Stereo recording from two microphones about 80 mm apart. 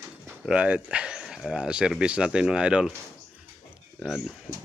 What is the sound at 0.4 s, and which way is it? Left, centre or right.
Speech, centre.